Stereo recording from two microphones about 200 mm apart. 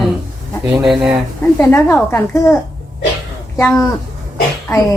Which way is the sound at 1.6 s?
10° left (ahead or behind).